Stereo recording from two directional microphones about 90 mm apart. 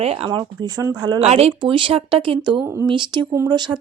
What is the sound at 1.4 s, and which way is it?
Speech, 85° right.